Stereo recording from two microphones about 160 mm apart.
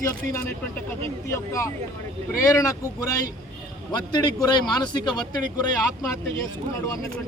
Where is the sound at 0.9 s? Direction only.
20° left (ahead or behind).